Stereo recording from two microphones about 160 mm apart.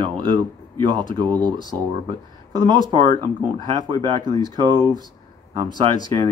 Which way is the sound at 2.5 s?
30° right (ahead or behind).